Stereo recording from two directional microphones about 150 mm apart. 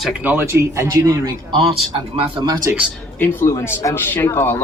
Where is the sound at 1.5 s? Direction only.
40° right (ahead or behind).